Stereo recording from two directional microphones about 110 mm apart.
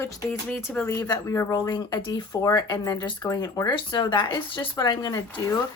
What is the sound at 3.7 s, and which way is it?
Speech, 45° left (ahead or behind).